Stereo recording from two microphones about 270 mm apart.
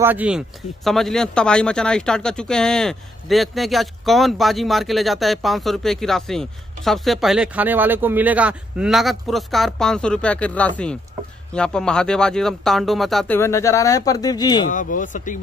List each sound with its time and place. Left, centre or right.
0.0 s speech: centre
14.7 s speech: left